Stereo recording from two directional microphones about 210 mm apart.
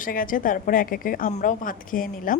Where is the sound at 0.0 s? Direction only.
40° left (ahead or behind).